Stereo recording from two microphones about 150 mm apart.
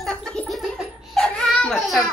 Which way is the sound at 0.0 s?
5° left (ahead or behind).